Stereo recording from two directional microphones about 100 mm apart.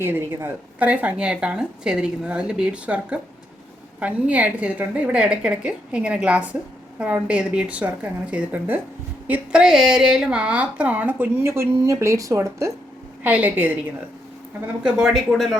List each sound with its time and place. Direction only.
0.0 s a woman's voice: 20° right (ahead or behind)
13.2 s speech: 15° right (ahead or behind)
14.8 s speech: 5° right (ahead or behind)